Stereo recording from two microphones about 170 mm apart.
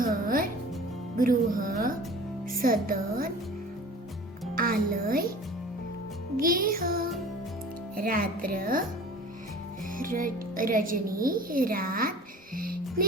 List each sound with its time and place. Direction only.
0.0 s music: 55° right (ahead or behind)
4.5 s speech: 55° right (ahead or behind)
6.3 s music: 55° right (ahead or behind)
10.0 s music: 55° right (ahead or behind)
12.5 s speech: 60° right (ahead or behind)